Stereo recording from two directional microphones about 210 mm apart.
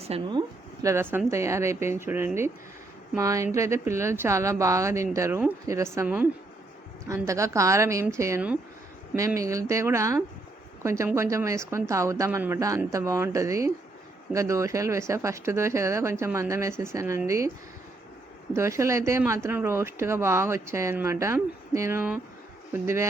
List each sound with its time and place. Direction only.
0.0 s speech: 25° right (ahead or behind)
18.5 s speech: 15° right (ahead or behind)